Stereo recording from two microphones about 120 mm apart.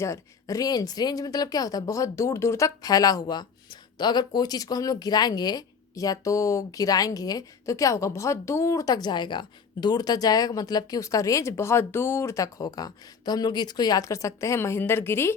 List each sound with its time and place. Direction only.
0.0 s speech: 25° left (ahead or behind)